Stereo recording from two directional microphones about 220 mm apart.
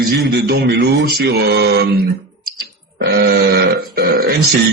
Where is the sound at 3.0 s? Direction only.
45° right (ahead or behind).